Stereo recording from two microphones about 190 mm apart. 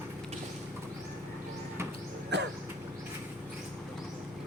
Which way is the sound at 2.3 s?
65° right (ahead or behind).